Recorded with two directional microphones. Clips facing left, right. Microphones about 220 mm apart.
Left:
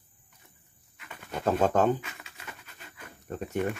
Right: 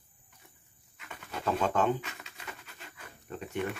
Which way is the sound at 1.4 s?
40° left (ahead or behind).